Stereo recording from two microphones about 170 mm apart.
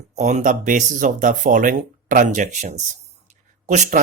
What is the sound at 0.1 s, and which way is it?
Speech, 45° right (ahead or behind).